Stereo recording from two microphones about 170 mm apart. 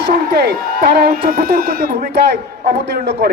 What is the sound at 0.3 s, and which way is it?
Speech, 70° right (ahead or behind).